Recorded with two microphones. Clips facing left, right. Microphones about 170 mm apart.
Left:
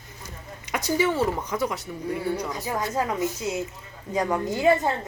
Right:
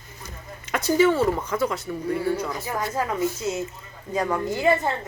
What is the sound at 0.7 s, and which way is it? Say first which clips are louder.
Speech: right 5 dB; 15° left (ahead or behind).